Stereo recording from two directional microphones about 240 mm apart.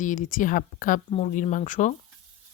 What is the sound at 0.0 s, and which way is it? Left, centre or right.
Speech, left.